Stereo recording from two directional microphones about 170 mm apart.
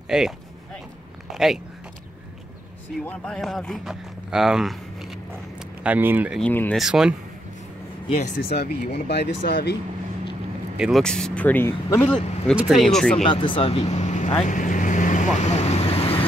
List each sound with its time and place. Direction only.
0.1 s speech: 5° right (ahead or behind)
1.3 s speech: centre (ahead or behind)
3.1 s speech: 5° left (ahead or behind)
5.9 s speech: 10° right (ahead or behind)
6.4 s speech: 10° left (ahead or behind)
6.8 s speech: 5° right (ahead or behind)
8.4 s speech: 65° left (ahead or behind)
10.8 s speech: centre (ahead or behind)
12.2 s speech: 40° left (ahead or behind)
12.5 s speech: centre (ahead or behind)
13.3 s speech: 30° left (ahead or behind)
14.3 s vehicle: 45° left (ahead or behind)